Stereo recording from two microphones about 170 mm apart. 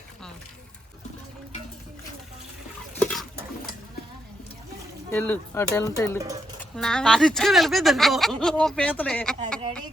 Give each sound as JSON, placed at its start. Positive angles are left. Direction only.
{"t": 2.9, "sound": "a sound", "side_deg": 5}
{"t": 5.1, "sound": "speech", "side_deg": 15}
{"t": 6.1, "sound": "speech", "side_deg": -20}
{"t": 6.6, "sound": "speech", "side_deg": 5}